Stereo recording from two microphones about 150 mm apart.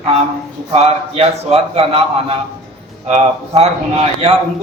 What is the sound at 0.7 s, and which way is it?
A man's voice, 40° right (ahead or behind).